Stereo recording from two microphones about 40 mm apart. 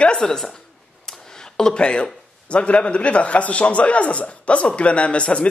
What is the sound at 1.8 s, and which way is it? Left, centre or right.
A man's voice, left.